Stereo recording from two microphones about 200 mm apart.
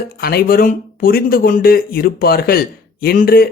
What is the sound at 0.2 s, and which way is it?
Speech, 50° left (ahead or behind).